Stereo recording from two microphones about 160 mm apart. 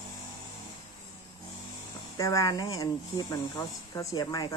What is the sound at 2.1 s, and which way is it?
Speech, 20° left (ahead or behind).